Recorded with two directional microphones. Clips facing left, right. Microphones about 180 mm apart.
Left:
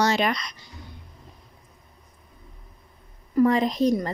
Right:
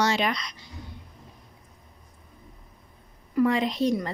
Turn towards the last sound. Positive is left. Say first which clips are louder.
# left 3 dB
turn(degrees=40)  # may be behind; listen again after turning